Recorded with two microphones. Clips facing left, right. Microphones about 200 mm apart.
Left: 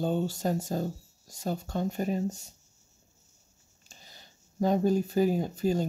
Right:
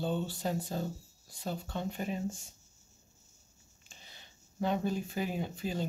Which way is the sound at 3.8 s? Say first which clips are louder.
Left 3 dB; 40° left (ahead or behind).